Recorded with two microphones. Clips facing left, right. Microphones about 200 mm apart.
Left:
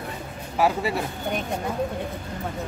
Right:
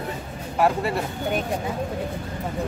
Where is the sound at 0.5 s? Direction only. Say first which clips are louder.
Right 1 dB; centre (ahead or behind).